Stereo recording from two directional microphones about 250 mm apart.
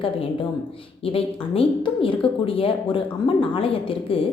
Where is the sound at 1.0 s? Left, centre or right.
Left.